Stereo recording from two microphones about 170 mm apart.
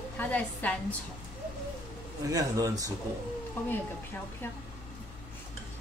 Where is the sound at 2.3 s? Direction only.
20° right (ahead or behind).